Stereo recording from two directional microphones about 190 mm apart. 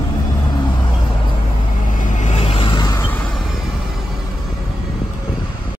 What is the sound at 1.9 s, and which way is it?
Vehicle, 45° left (ahead or behind).